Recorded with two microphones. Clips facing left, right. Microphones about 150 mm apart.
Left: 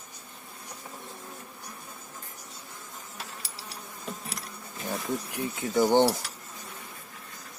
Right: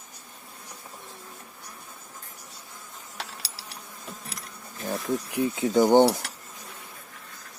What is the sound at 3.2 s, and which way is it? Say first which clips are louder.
Insect: right 4 dB; 90° right.